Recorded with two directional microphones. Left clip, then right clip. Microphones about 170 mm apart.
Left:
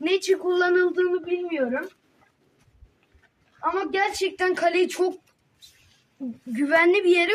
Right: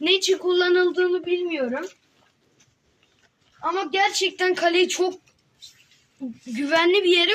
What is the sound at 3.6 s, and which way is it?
Speech, centre (ahead or behind).